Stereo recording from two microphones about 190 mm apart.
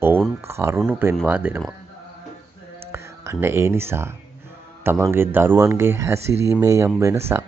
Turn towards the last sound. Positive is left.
turn(degrees=-15)  # may be behind; listen again after turning